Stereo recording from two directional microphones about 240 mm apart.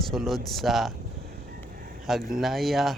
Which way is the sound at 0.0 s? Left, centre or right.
Centre.